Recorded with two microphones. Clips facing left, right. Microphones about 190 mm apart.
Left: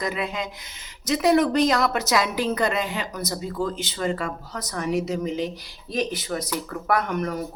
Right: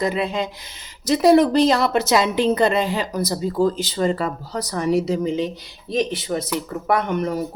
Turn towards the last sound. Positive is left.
turn(degrees=-25)  # may be behind; listen again after turning